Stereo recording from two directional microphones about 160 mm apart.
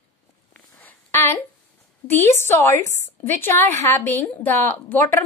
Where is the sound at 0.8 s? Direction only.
10° left (ahead or behind).